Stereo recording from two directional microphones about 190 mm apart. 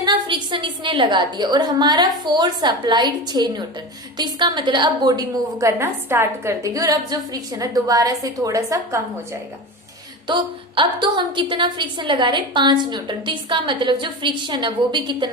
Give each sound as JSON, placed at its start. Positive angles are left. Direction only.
{"t": 0.0, "sound": "a woman's voice", "side_deg": -25}